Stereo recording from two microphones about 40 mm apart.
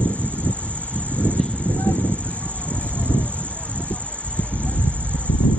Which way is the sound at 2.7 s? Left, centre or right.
Left.